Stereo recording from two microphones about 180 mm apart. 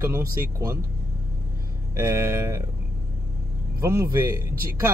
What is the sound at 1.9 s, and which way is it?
Speech, 15° right (ahead or behind).